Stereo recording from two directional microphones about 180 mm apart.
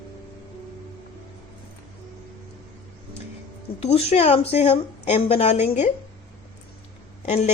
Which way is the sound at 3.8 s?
35° left (ahead or behind).